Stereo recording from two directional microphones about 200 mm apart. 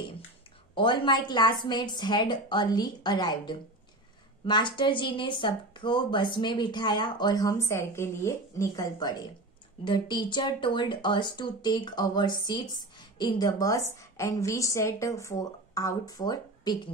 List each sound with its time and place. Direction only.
0.7 s a woman's voice: 25° left (ahead or behind)